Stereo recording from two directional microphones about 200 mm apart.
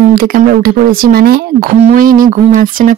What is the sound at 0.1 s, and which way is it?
Speech, 50° right (ahead or behind).